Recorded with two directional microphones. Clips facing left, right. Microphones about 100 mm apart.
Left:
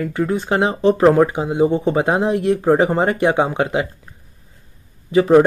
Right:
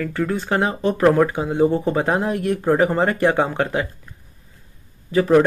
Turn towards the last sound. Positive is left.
turn(degrees=20)  # may be behind; listen again after turning